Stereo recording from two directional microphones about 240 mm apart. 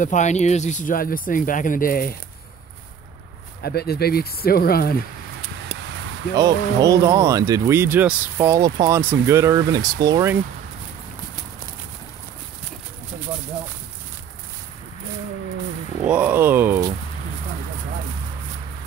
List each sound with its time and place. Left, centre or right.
0.0 s speech: left
3.6 s speech: left
6.3 s speech: centre
16.0 s speech: centre